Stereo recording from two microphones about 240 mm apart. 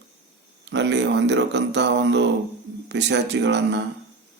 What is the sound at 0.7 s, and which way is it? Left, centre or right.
Speech, right.